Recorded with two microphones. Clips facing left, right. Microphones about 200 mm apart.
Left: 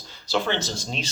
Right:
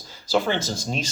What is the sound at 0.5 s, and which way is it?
Speech, 45° right (ahead or behind).